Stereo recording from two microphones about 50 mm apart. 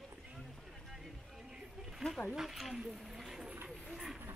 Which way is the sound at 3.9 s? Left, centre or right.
Centre.